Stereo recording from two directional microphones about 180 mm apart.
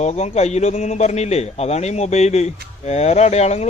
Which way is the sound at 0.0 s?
35° left (ahead or behind).